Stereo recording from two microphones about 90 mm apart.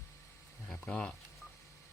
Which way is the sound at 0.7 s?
10° left (ahead or behind).